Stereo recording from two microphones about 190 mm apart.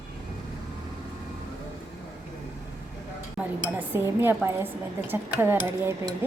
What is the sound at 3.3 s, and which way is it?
Speech, 10° right (ahead or behind).